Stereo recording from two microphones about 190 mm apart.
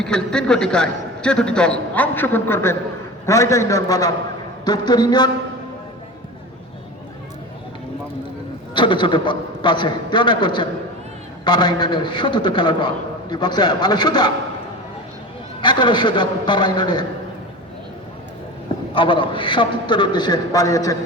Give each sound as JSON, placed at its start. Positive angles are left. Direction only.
{"t": 0.0, "sound": "a man's voice", "side_deg": 5}
{"t": 8.7, "sound": "a man's voice", "side_deg": 25}
{"t": 15.6, "sound": "a man's voice", "side_deg": 25}
{"t": 18.9, "sound": "a man's voice", "side_deg": 25}